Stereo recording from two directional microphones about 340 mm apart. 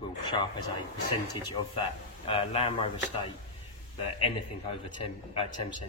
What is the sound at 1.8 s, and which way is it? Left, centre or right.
Speech, centre.